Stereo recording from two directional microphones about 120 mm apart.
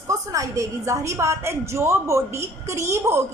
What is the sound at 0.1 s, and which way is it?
A woman's voice, 25° right (ahead or behind).